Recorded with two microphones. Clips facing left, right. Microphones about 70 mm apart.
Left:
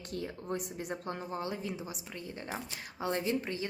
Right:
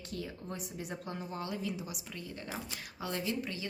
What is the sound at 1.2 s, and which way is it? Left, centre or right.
A woman's voice, left.